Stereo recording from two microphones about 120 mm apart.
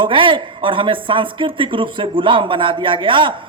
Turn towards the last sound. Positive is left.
turn(degrees=-45)  # may be behind; listen again after turning